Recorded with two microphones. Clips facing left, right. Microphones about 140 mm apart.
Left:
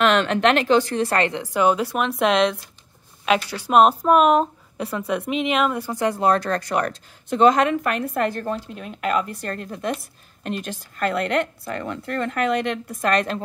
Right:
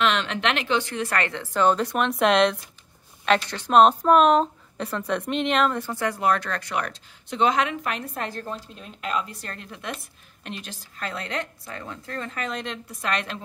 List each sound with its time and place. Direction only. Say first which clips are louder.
0.0 s a woman's voice: left 6 dB; 50° left (ahead or behind)